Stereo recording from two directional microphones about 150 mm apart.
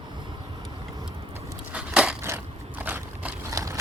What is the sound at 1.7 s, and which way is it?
Crushing, 5° right (ahead or behind).